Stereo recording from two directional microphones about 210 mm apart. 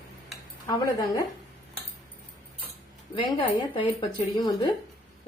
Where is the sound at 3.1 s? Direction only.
25° left (ahead or behind).